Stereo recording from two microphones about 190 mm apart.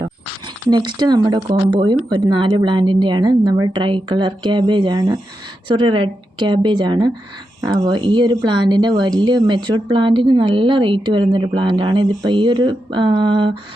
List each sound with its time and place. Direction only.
0.0 s speech: 20° right (ahead or behind)